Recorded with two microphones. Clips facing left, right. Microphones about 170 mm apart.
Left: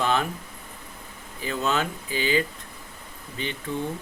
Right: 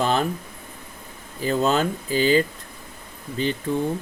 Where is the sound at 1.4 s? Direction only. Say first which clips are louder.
Right 6 dB; 35° right (ahead or behind).